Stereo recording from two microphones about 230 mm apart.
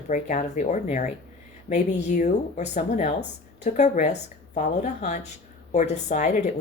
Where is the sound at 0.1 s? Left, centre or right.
Left.